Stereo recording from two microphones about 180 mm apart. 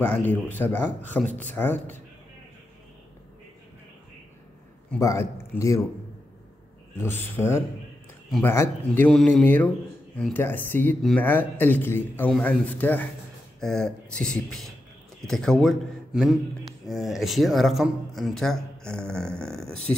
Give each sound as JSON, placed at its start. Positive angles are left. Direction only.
{"t": 0.0, "sound": "speech", "side_deg": 10}
{"t": 5.0, "sound": "speech", "side_deg": 15}
{"t": 7.0, "sound": "speech", "side_deg": 10}